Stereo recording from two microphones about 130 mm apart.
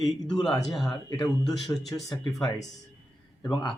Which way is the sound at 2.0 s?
35° left (ahead or behind).